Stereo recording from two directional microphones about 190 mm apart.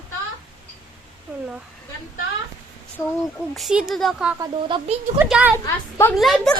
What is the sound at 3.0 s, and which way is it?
Speech, 15° left (ahead or behind).